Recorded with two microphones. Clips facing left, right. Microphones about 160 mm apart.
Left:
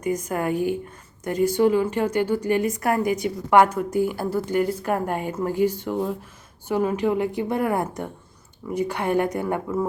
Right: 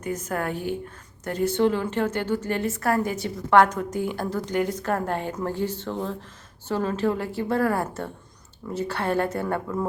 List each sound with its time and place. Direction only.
0.0 s a woman's voice: 10° left (ahead or behind)